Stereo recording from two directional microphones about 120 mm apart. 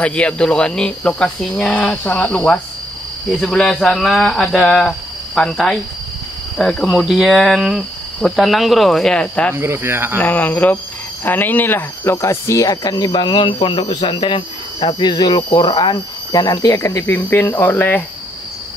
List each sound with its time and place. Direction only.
0.0 s speech: 10° left (ahead or behind)
9.5 s cricket: 20° right (ahead or behind)
10.1 s speech: 15° left (ahead or behind)